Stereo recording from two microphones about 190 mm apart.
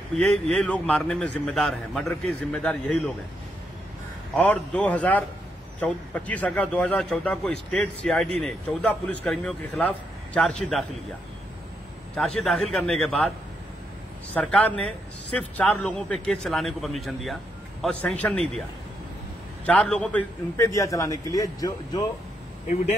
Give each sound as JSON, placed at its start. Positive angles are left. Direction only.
{"t": 0.1, "sound": "a man's voice", "side_deg": 5}
{"t": 4.4, "sound": "a man's voice", "side_deg": 5}
{"t": 12.4, "sound": "a man's voice", "side_deg": 5}
{"t": 14.3, "sound": "a man's voice", "side_deg": 5}
{"t": 19.6, "sound": "a man's voice", "side_deg": 5}